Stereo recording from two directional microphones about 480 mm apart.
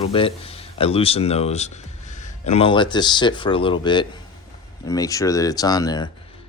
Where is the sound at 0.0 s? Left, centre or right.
Centre.